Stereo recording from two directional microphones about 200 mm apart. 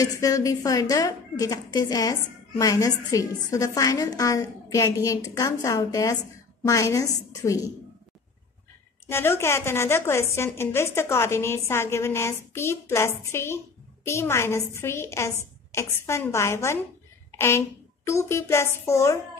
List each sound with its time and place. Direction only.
0.2 s speech: 15° left (ahead or behind)
9.0 s a child's voice: 10° left (ahead or behind)